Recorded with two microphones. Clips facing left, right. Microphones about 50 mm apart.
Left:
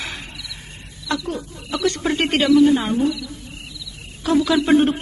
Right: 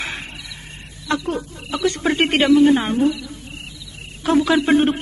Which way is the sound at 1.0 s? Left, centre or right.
Right.